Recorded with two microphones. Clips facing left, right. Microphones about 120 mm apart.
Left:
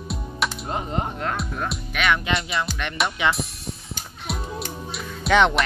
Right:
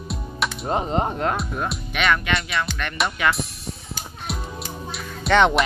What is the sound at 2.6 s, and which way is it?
Music, 15° left (ahead or behind).